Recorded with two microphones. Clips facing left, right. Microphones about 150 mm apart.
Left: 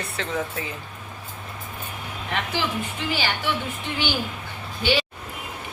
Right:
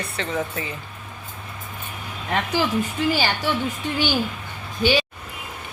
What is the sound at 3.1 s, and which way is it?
Speech, 45° right (ahead or behind).